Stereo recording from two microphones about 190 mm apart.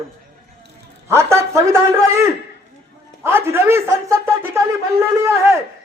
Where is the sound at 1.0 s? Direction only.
15° right (ahead or behind).